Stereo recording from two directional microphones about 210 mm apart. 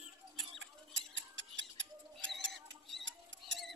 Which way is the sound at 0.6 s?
60° right (ahead or behind).